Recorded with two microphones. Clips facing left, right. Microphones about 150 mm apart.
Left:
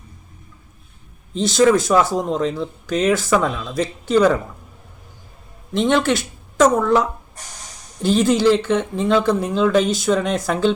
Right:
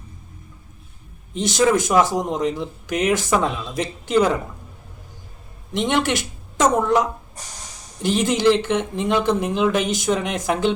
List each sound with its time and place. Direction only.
1.3 s speech: 20° right (ahead or behind)
5.7 s speech: 15° right (ahead or behind)